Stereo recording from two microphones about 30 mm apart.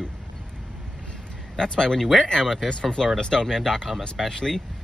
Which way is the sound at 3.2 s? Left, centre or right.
Left.